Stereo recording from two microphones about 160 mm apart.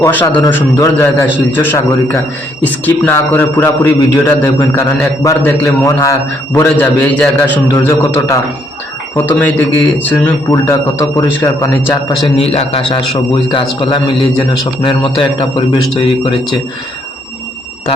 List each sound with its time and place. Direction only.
0.0 s a man's voice: 15° left (ahead or behind)
12.4 s a man's voice: 40° left (ahead or behind)